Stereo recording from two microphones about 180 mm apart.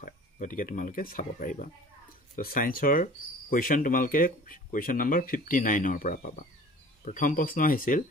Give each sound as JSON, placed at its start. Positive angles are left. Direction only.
{"t": 0.0, "sound": "speech", "side_deg": 45}